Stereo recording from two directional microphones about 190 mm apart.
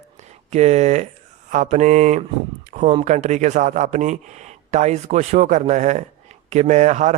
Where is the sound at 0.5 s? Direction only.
35° right (ahead or behind).